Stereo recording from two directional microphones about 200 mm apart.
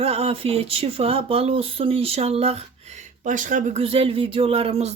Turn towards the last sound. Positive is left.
turn(degrees=-30)  # may be behind; listen again after turning